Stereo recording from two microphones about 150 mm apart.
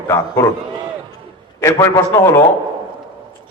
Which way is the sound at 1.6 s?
20° left (ahead or behind).